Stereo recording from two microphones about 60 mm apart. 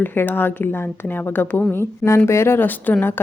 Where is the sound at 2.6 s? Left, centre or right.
Left.